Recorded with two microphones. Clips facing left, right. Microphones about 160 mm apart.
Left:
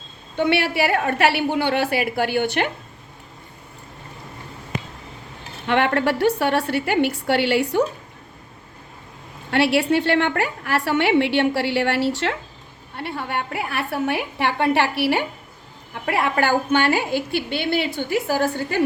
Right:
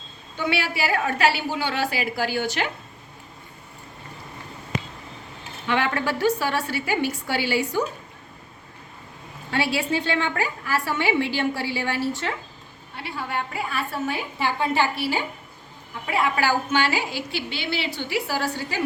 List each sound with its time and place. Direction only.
0.3 s a woman's voice: 60° left (ahead or behind)
5.6 s a woman's voice: 60° left (ahead or behind)
9.5 s a woman's voice: 65° left (ahead or behind)
13.0 s a woman's voice: 60° left (ahead or behind)